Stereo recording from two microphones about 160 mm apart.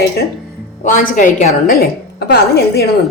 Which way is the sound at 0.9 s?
60° left (ahead or behind).